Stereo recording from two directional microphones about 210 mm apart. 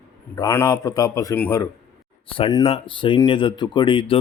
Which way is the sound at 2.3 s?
20° left (ahead or behind).